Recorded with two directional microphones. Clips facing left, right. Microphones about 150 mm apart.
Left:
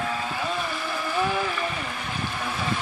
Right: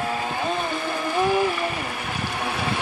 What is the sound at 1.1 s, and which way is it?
Boat, 10° right (ahead or behind).